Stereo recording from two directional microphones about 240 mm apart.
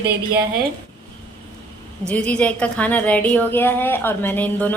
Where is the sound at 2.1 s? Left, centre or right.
Centre.